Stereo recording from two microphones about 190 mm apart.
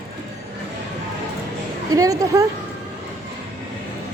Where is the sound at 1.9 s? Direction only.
20° right (ahead or behind).